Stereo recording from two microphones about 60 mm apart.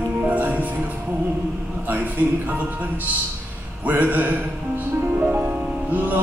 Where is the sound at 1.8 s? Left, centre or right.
Right.